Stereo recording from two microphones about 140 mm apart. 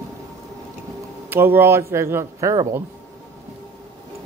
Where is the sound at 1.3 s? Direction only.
15° right (ahead or behind).